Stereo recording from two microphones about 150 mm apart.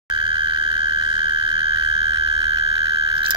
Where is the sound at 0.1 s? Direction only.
35° right (ahead or behind).